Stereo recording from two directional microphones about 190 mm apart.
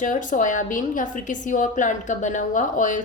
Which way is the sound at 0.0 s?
40° left (ahead or behind).